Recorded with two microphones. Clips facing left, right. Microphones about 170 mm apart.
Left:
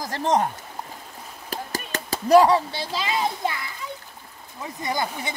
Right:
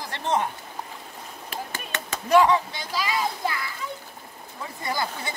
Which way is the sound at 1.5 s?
35° left (ahead or behind).